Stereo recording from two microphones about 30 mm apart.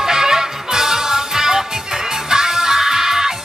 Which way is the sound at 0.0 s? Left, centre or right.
Centre.